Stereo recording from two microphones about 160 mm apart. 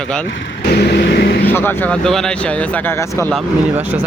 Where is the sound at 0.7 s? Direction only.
85° left.